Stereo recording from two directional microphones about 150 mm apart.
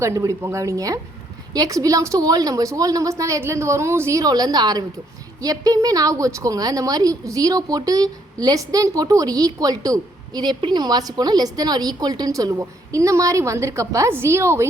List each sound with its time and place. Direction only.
0.0 s a woman's voice: 20° right (ahead or behind)